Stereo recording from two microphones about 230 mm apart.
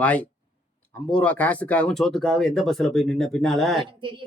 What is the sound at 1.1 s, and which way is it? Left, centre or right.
Speech, centre.